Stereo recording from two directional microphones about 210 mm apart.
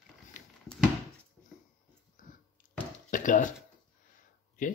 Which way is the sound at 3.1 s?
40° left (ahead or behind).